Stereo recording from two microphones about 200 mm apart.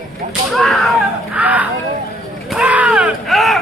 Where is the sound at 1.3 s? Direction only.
5° right (ahead or behind).